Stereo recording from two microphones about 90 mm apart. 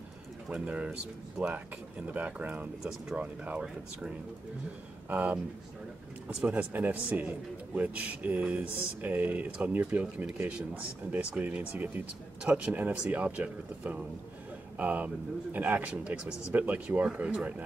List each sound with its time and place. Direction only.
0.5 s speech: 10° right (ahead or behind)
2.8 s speech: 5° right (ahead or behind)
5.1 s speech: 15° right (ahead or behind)